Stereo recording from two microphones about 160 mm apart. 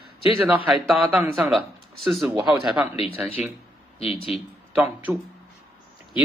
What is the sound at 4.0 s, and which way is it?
Speech, 35° left (ahead or behind).